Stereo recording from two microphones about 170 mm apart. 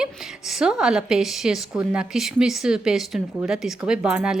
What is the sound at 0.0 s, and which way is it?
A woman's voice, 5° right (ahead or behind).